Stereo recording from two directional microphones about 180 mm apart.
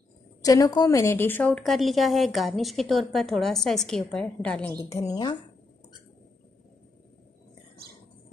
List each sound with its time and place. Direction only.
0.4 s a woman's voice: 20° left (ahead or behind)
4.8 s a woman's voice: 20° left (ahead or behind)